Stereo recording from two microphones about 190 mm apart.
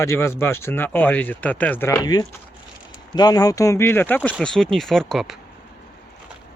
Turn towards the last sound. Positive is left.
turn(degrees=0)  # may be behind; listen again after turning